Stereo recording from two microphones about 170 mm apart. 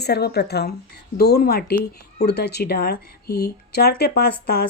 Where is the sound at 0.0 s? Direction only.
70° left (ahead or behind).